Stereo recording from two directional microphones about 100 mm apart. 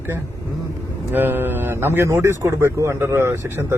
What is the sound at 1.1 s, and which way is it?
Speech, 20° right (ahead or behind).